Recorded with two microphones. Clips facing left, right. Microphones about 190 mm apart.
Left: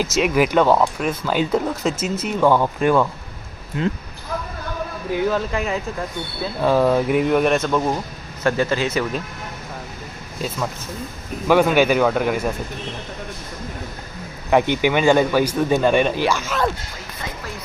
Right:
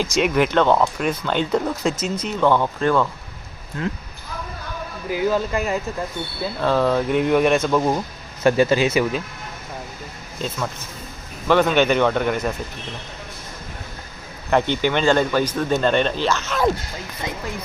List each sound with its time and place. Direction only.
0.0 s speech: 5° left (ahead or behind); by 3.9 s 20° left (ahead or behind)
5.1 s speech: centre (ahead or behind)
6.6 s speech: 10° left (ahead or behind)
8.4 s speech: 15° right (ahead or behind)
11.4 s speech: 10° left (ahead or behind)
14.5 s speech: 10° left (ahead or behind)